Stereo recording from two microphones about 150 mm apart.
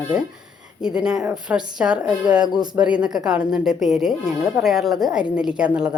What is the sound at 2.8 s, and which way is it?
A woman's voice, 5° right (ahead or behind).